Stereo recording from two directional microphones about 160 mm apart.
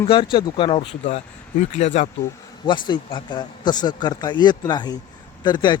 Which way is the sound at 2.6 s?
30° left (ahead or behind).